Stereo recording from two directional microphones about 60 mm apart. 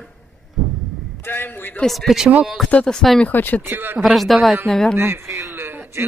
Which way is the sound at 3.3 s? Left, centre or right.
Left.